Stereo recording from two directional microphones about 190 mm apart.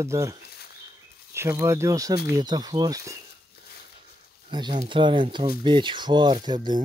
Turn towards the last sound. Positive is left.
turn(degrees=-20)  # may be behind; listen again after turning